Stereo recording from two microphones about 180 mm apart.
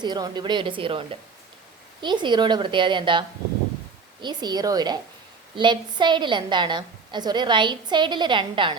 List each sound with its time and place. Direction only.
0.0 s a woman's voice: 25° right (ahead or behind)